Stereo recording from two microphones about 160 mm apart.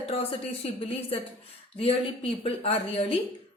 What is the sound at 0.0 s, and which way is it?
A woman's voice, 40° left (ahead or behind).